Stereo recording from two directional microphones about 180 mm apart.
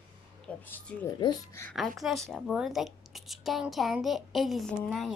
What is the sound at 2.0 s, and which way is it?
A child's voice, centre (ahead or behind).